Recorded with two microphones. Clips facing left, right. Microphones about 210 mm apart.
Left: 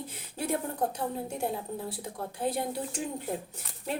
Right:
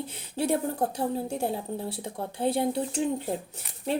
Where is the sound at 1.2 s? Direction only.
30° right (ahead or behind).